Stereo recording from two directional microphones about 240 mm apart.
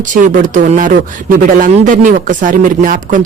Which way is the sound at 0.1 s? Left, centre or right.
Right.